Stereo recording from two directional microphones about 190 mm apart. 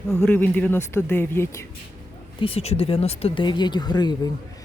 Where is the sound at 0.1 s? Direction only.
5° left (ahead or behind).